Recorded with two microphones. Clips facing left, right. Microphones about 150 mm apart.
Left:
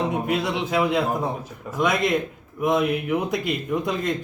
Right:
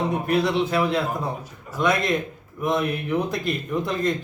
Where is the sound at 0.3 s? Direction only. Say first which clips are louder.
Right 3 dB; 15° left (ahead or behind).